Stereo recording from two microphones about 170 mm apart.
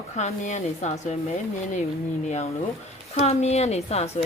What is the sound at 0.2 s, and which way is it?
Speech, 40° left (ahead or behind).